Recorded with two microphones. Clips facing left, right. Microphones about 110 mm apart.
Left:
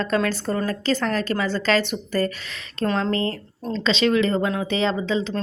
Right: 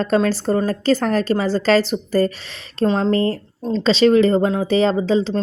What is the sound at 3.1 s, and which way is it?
A woman's voice, 40° right (ahead or behind).